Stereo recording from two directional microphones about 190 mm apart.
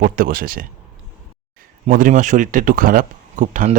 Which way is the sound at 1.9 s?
45° right (ahead or behind).